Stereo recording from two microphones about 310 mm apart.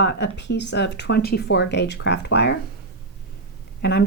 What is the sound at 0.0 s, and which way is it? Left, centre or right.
Speech, left.